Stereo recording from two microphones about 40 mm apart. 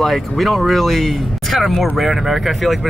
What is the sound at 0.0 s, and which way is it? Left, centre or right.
Speech, centre.